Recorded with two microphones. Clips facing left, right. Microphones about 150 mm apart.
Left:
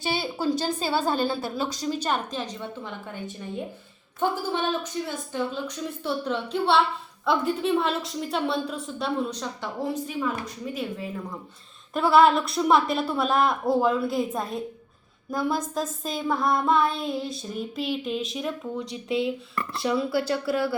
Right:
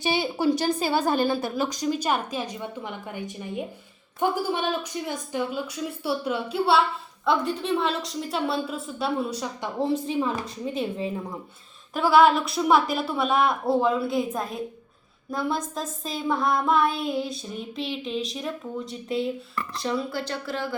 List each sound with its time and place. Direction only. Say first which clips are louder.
0.0 s a woman's voice: right 3 dB; 15° right (ahead or behind)
7.3 s speech: even; 5° left (ahead or behind)
9.9 s a woman's voice: right 4 dB; 25° right (ahead or behind)
11.9 s speech: even; centre (ahead or behind)